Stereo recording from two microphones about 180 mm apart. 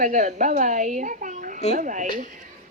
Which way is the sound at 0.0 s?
45° right (ahead or behind).